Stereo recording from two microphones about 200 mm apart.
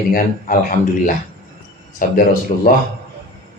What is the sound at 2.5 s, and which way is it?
Speech, 30° left (ahead or behind).